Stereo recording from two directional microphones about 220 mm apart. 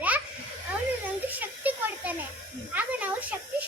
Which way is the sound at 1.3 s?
10° right (ahead or behind).